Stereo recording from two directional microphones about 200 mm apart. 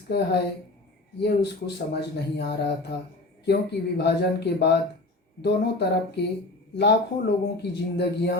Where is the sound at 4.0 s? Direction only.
60° left (ahead or behind).